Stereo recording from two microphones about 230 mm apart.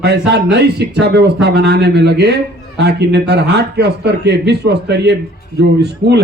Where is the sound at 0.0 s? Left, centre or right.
Right.